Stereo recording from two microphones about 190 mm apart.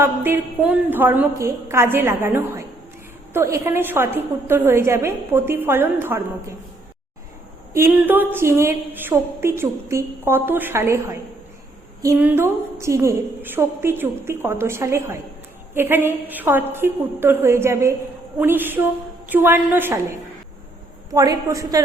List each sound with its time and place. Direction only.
0.0 s a woman's voice: 10° right (ahead or behind)
7.7 s a woman's voice: 10° right (ahead or behind)